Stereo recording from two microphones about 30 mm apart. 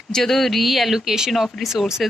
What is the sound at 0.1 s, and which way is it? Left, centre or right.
Speech, centre.